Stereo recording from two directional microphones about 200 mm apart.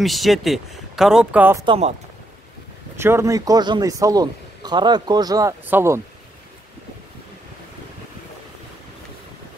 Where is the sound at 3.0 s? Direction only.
15° right (ahead or behind).